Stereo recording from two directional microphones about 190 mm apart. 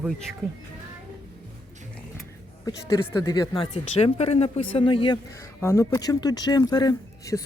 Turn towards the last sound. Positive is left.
turn(degrees=20)  # may be behind; listen again after turning